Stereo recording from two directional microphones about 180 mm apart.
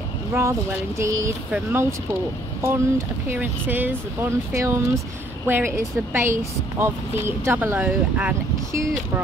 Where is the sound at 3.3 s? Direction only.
10° right (ahead or behind).